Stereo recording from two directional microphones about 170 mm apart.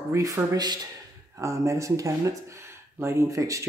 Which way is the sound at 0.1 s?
20° right (ahead or behind).